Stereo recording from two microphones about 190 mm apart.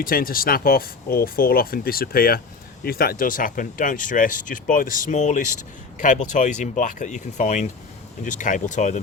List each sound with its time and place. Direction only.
0.0 s speech: 50° left (ahead or behind)